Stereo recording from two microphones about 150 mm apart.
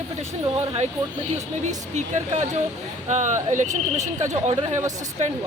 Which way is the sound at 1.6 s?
50° right (ahead or behind).